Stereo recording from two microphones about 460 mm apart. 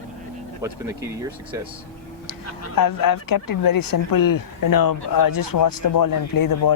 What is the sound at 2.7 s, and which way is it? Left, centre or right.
Speech, left.